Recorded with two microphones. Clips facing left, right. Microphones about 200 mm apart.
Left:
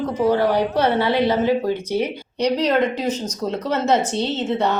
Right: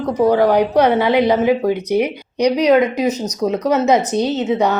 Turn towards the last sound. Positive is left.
turn(degrees=-10)  # may be behind; listen again after turning